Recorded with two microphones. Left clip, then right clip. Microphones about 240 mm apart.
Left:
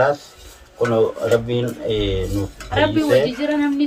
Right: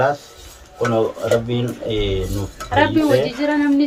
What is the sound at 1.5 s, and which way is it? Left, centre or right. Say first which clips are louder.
Speech: left 1 dB; left.